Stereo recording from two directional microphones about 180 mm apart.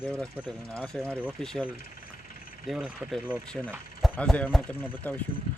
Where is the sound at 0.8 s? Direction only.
5° left (ahead or behind).